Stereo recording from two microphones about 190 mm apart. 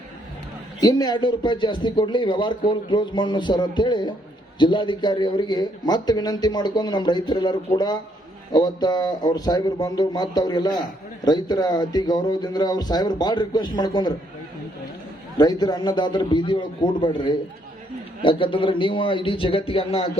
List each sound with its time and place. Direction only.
0.8 s a man's voice: 20° left (ahead or behind)
8.5 s a man's voice: 20° left (ahead or behind)
15.4 s a man's voice: 20° left (ahead or behind)